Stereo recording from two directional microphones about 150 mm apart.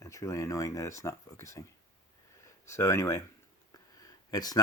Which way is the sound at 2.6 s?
20° left (ahead or behind).